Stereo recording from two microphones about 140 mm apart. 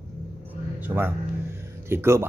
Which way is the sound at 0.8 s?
15° right (ahead or behind).